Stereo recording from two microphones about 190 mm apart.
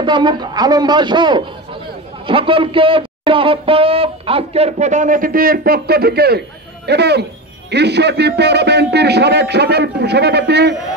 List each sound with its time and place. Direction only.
0.0 s a man's voice: 25° right (ahead or behind); by 10.8 s 60° right (ahead or behind)